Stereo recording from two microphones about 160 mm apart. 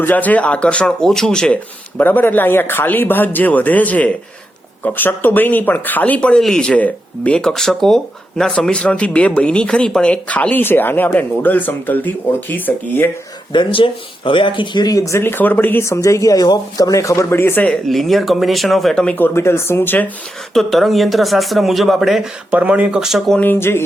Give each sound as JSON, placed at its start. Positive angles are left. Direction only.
{"t": 0.0, "sound": "speech", "side_deg": 10}
{"t": 13.5, "sound": "speech", "side_deg": 30}
{"t": 20.5, "sound": "speech", "side_deg": 0}